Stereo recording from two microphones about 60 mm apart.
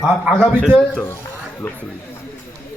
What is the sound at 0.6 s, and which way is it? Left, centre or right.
Speech, centre.